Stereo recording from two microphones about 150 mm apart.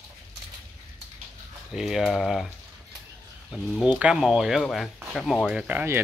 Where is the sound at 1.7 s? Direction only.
5° right (ahead or behind).